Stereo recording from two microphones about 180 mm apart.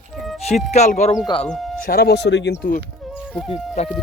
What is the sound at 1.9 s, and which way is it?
Speech, 60° left (ahead or behind).